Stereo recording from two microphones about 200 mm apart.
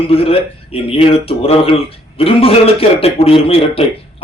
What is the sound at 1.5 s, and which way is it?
A man's voice, 30° left (ahead or behind).